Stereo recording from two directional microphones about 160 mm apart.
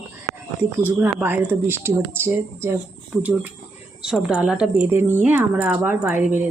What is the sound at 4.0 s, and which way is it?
Speech, 5° right (ahead or behind).